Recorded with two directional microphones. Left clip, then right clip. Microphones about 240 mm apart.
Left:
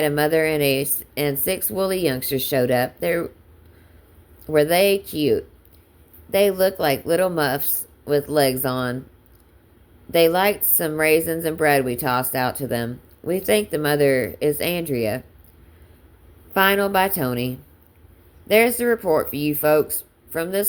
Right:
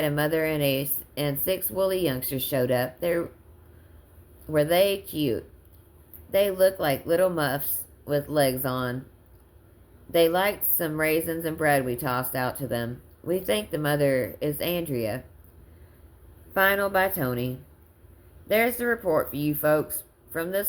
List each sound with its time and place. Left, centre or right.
0.0 s a woman's voice: left
4.5 s a woman's voice: left
10.1 s a woman's voice: left
16.6 s a woman's voice: left